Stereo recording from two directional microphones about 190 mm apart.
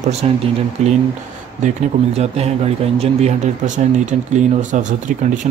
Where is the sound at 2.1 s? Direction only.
35° right (ahead or behind).